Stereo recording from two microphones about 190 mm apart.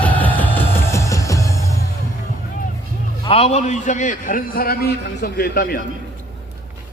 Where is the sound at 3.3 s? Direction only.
30° left (ahead or behind); by 5.7 s 55° left (ahead or behind).